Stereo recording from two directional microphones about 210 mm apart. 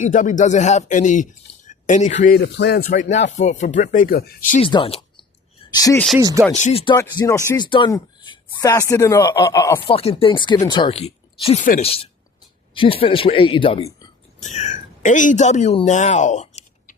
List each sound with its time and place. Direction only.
0.0 s speech: 40° left (ahead or behind)
2.4 s speech: 55° left (ahead or behind)
2.8 s speech: 35° left (ahead or behind)
4.6 s speech: 25° left (ahead or behind)
6.1 s speech: 15° right (ahead or behind)
6.5 s speech: 35° left (ahead or behind)
6.9 s speech: 15° left (ahead or behind)
9.9 s speech: 30° left (ahead or behind)
12.7 s speech: 25° left (ahead or behind)